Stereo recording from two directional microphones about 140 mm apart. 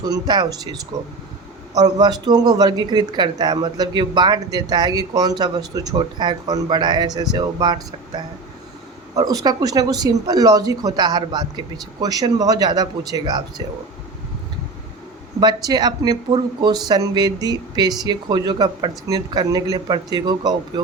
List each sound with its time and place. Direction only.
0.0 s speech: 30° right (ahead or behind)
15.4 s speech: 30° right (ahead or behind)